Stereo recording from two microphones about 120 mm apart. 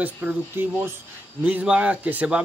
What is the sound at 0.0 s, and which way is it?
Speech, 15° right (ahead or behind).